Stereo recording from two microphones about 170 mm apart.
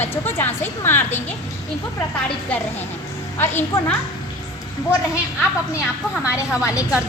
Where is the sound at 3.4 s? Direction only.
10° left (ahead or behind).